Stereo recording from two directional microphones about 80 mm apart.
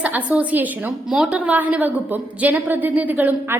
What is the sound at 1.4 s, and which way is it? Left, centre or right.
A woman's voice, centre.